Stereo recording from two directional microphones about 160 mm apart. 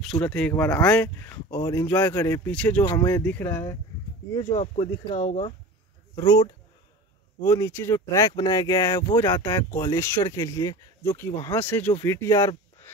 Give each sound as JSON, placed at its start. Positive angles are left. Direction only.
{"t": 0.0, "sound": "speech", "side_deg": 5}
{"t": 2.8, "sound": "speech", "side_deg": 20}
{"t": 4.4, "sound": "speech", "side_deg": 30}
{"t": 6.1, "sound": "speech", "side_deg": 20}